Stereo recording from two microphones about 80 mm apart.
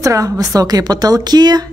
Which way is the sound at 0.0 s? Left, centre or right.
Right.